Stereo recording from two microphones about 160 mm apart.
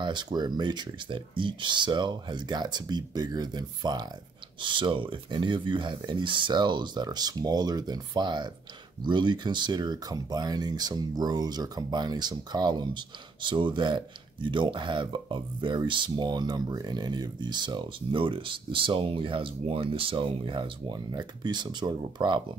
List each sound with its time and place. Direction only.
0.0 s speech: 30° right (ahead or behind)